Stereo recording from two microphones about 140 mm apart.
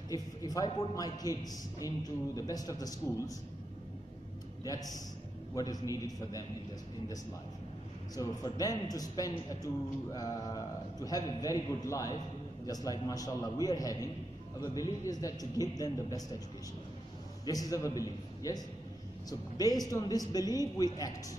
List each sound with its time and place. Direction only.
0.1 s a man's voice: 25° left (ahead or behind)
4.6 s a man's voice: 25° left (ahead or behind)
8.2 s a man's voice: 25° left (ahead or behind)
17.5 s a man's voice: 25° left (ahead or behind)